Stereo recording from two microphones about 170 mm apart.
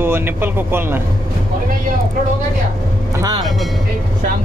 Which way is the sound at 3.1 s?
20° right (ahead or behind).